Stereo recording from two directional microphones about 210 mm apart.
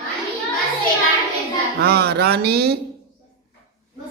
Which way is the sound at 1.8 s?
50° right (ahead or behind).